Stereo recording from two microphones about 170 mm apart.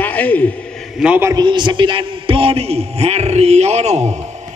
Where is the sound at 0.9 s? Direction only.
5° right (ahead or behind).